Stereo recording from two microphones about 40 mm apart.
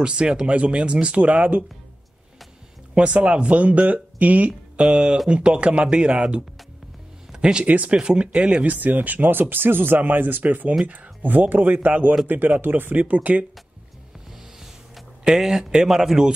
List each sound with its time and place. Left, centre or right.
0.0 s speech: right
0.5 s speech: right
1.2 s speech: right
2.9 s speech: right
4.7 s speech: right
7.6 s speech: right
8.0 s speech: right
8.6 s speech: right
13.0 s speech: right
15.3 s speech: centre